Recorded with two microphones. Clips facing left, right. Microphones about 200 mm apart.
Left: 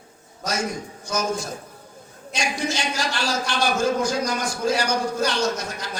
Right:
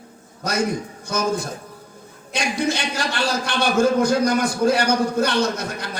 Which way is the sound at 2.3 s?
60° right (ahead or behind).